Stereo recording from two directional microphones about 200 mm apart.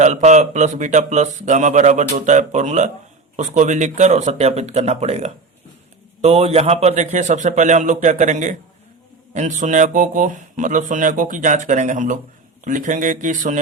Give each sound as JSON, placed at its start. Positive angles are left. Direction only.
{"t": 0.0, "sound": "a man's voice", "side_deg": -35}